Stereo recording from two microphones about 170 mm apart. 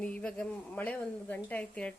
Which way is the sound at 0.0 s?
5° left (ahead or behind).